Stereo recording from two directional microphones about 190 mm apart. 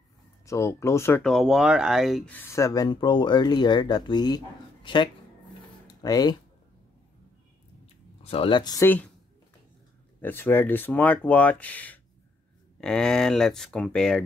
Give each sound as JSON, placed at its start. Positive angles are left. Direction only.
{"t": 0.5, "sound": "speech", "side_deg": 15}
{"t": 1.2, "sound": "speech", "side_deg": 0}
{"t": 2.3, "sound": "speech", "side_deg": 15}
{"t": 8.3, "sound": "speech", "side_deg": 25}
{"t": 10.2, "sound": "speech", "side_deg": 10}